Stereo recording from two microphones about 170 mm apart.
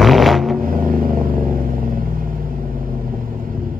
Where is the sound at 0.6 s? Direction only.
55° right (ahead or behind).